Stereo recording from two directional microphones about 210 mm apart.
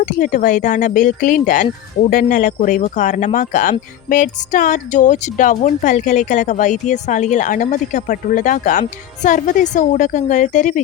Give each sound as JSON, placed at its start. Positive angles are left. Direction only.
{"t": 0.0, "sound": "speech", "side_deg": 40}